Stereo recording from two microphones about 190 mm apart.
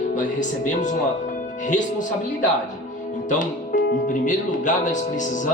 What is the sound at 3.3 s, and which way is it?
Speech, 40° left (ahead or behind).